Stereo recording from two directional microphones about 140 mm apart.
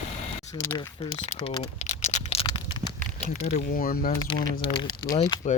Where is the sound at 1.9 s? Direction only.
55° left (ahead or behind).